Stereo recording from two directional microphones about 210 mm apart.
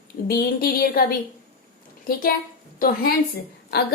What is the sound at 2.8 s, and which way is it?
Speech, 40° left (ahead or behind).